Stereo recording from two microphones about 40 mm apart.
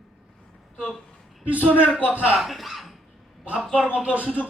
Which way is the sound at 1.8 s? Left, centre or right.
Right.